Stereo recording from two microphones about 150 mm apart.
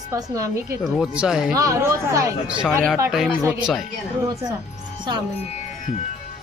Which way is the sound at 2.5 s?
5° right (ahead or behind).